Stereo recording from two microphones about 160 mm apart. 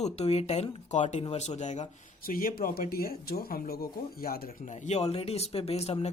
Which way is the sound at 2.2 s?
65° left (ahead or behind).